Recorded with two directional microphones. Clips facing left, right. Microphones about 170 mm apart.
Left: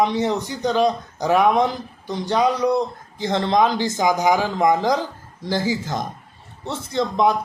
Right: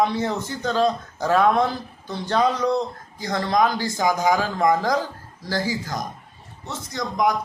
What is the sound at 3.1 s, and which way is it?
A man's voice, 25° left (ahead or behind).